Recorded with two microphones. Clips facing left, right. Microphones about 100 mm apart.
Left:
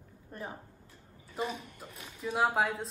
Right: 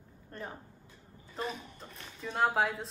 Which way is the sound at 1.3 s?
Centre (ahead or behind).